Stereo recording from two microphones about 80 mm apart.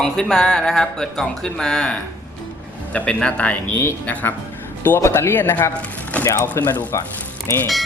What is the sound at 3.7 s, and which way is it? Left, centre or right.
Speech, left.